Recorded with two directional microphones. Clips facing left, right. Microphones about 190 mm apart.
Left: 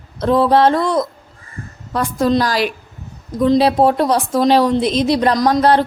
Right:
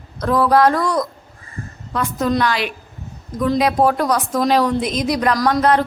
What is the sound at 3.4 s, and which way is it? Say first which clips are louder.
A woman's voice: left 4 dB; 25° left (ahead or behind).